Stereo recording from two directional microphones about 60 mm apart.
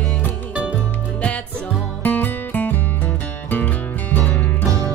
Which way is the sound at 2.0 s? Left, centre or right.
Left.